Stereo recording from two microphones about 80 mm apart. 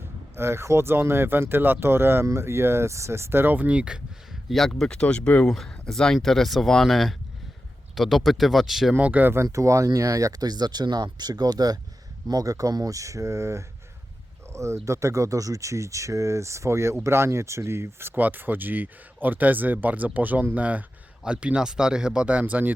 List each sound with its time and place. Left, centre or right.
0.3 s speech: right; by 9.0 s centre
9.0 s speech: centre
9.3 s speech: right
18.1 s speech: right